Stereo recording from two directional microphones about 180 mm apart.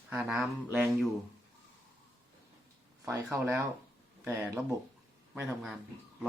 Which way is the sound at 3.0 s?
15° right (ahead or behind).